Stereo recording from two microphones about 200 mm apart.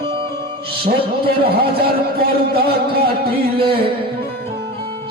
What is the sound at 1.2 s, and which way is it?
Speech, 50° right (ahead or behind).